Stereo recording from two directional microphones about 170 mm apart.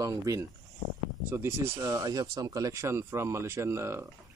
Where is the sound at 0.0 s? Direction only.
20° right (ahead or behind).